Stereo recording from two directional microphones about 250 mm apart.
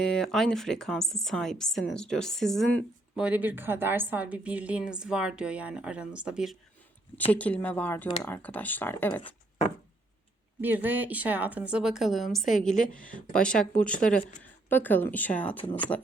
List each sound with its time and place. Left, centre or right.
0.0 s speech: centre
10.6 s speech: centre
14.2 s a woman's voice: left
14.7 s speech: centre